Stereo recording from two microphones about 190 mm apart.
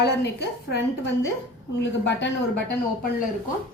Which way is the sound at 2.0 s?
65° left (ahead or behind).